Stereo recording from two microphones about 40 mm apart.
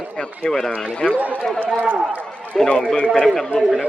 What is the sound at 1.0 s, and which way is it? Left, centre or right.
Speech, left.